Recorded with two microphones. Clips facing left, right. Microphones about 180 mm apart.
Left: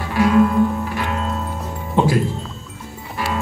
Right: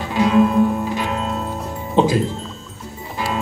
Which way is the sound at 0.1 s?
20° right (ahead or behind).